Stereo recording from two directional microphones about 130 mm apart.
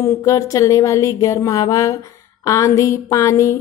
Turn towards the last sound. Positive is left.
turn(degrees=25)  # may be behind; listen again after turning